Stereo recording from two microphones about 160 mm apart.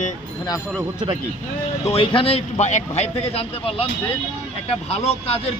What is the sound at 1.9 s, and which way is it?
A man's voice, 35° left (ahead or behind).